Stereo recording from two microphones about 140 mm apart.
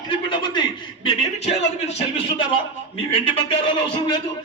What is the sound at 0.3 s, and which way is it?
Speech, 35° left (ahead or behind).